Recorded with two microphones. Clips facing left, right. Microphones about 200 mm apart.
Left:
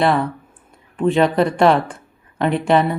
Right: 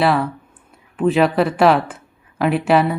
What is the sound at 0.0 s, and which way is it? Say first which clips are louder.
Speech: even; centre (ahead or behind).